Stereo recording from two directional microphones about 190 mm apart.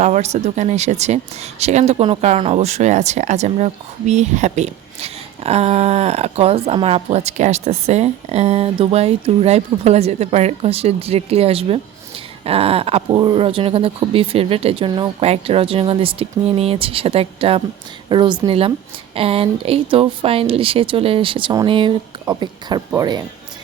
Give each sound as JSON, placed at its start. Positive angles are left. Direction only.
{"t": 0.0, "sound": "speech", "side_deg": -35}